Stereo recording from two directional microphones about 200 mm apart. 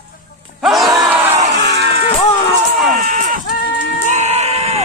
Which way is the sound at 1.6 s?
55° right (ahead or behind).